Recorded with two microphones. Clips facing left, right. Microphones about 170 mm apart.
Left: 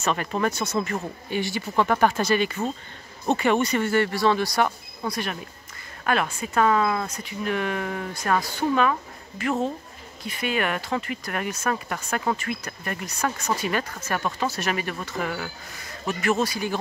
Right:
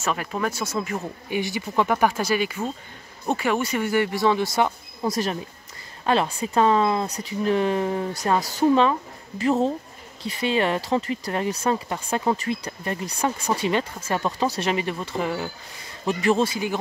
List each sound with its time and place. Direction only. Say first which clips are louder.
0.0 s speech: left 1 dB; 5° right (ahead or behind)
1.3 s speech: right 1 dB; 15° right (ahead or behind)
5.0 s speech: right 5 dB; 40° right (ahead or behind)
6.0 s speech: right 3 dB; 30° right (ahead or behind)
8.4 s speech: right 3 dB; 40° right (ahead or behind)
10.2 s speech: right 4 dB; 30° right (ahead or behind)